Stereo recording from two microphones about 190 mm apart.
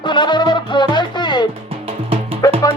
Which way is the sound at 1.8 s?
30° right (ahead or behind).